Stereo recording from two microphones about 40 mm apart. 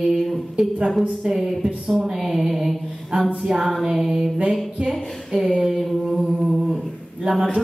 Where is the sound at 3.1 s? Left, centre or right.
Right.